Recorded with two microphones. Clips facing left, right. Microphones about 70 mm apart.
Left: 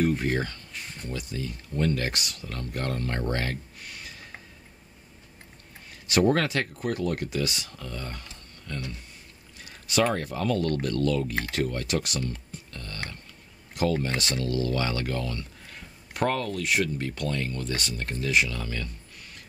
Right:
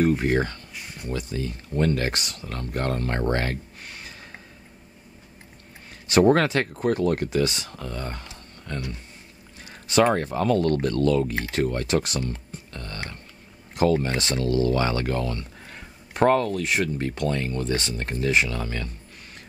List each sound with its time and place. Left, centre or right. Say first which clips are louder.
0.2 s speech: right 5 dB; right
0.7 s a sound: right 2 dB; centre
1.1 s speech: right 5 dB; right
6.4 s speech: right 5 dB; right
9.7 s a sound: right 5 dB; right
10.0 s speech: right 5 dB; right
12.3 s music: right 3 dB; right
13.7 s speech: right 5 dB; right